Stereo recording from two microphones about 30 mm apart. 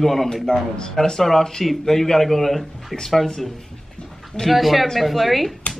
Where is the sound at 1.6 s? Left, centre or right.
Centre.